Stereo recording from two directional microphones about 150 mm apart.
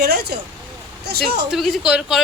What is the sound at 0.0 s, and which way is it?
Vehicle, 90° right.